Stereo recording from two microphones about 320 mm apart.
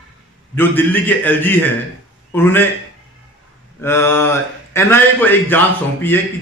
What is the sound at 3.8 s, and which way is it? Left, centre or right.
A man's voice, centre.